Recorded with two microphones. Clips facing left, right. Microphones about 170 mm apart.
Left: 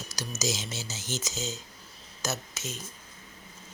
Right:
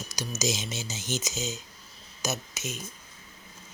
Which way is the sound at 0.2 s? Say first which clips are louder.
Right 2 dB; 15° right (ahead or behind).